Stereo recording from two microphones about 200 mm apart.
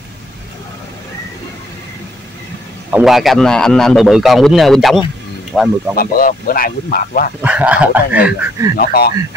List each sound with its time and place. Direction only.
2.9 s a man's voice: centre (ahead or behind)
5.9 s speech: 45° left (ahead or behind)
7.4 s speech: 5° right (ahead or behind)
8.7 s speech: 50° left (ahead or behind)